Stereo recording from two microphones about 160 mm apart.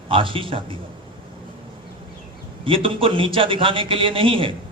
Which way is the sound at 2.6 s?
35° right (ahead or behind).